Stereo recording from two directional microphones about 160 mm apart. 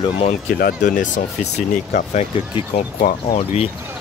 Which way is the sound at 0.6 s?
60° left (ahead or behind).